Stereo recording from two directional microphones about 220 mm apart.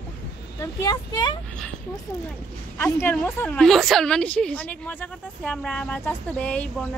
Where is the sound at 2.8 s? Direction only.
10° left (ahead or behind).